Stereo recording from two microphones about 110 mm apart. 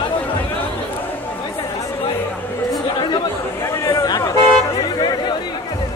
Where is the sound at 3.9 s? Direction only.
30° left (ahead or behind).